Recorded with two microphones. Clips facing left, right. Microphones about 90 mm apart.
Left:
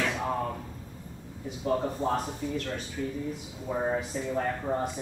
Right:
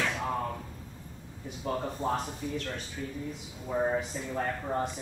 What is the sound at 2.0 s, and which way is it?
Speech, 20° left (ahead or behind).